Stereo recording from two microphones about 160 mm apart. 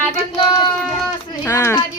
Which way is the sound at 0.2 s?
35° left (ahead or behind).